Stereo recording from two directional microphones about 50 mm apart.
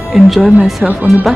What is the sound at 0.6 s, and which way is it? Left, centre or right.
Speech, centre.